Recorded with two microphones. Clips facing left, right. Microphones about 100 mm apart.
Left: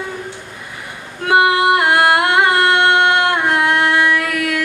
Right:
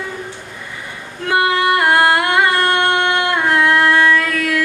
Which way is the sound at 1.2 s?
20° left (ahead or behind).